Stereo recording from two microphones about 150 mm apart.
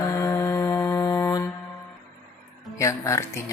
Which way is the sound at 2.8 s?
20° left (ahead or behind).